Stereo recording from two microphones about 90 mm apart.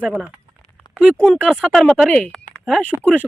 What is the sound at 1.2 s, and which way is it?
Speech, 10° left (ahead or behind).